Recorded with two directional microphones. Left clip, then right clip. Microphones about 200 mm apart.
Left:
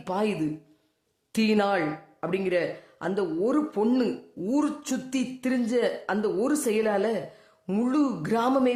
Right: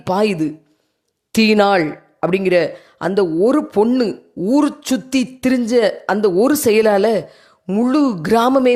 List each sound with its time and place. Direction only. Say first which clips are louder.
0.0 s speech: right 11 dB; 40° right (ahead or behind)